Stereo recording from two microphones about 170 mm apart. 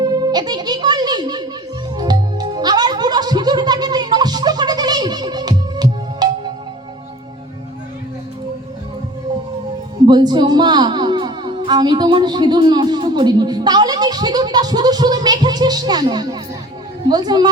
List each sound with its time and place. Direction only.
0.0 s music: 25° right (ahead or behind)
10.1 s a woman's voice: 25° right (ahead or behind)